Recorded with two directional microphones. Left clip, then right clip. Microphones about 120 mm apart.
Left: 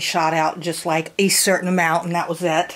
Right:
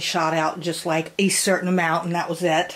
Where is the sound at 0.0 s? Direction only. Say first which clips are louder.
Left 3 dB; 25° left (ahead or behind).